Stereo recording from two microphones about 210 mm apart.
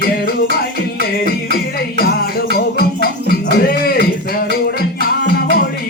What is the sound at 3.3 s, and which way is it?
Music, 45° left (ahead or behind).